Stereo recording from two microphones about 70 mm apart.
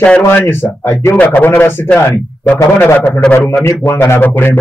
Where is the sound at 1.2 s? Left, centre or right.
Left.